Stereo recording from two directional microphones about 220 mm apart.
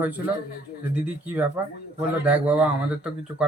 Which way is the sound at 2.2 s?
5° right (ahead or behind).